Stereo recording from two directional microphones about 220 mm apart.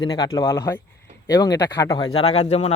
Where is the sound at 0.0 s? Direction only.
20° left (ahead or behind).